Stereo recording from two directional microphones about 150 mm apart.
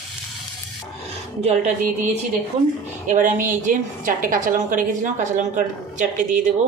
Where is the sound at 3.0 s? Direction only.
60° right (ahead or behind).